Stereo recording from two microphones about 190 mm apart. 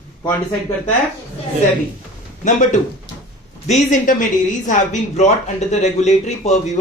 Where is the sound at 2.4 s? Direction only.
40° left (ahead or behind).